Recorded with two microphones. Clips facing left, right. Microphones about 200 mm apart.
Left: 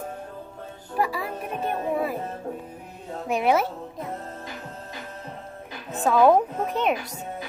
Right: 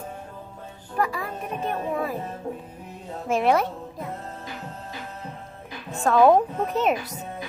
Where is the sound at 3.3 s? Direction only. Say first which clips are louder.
Right 1 dB; centre (ahead or behind).